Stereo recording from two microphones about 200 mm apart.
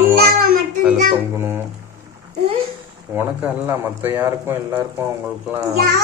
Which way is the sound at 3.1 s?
10° right (ahead or behind).